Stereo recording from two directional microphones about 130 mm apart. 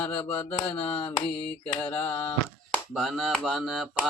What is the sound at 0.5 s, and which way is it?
Speech, 40° left (ahead or behind).